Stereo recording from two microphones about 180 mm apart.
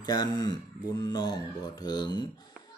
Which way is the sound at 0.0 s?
20° left (ahead or behind).